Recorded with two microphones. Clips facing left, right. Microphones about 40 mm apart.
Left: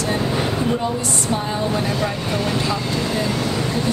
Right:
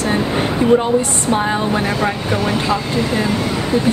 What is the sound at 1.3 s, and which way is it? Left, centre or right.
Speech, right.